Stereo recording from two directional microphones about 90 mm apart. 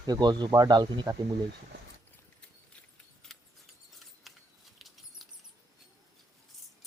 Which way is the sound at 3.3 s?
Centre (ahead or behind).